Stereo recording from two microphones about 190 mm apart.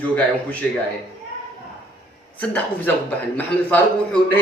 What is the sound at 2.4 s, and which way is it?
A man's voice, 10° left (ahead or behind).